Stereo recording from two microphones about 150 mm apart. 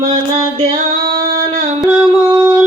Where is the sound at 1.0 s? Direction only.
80° right.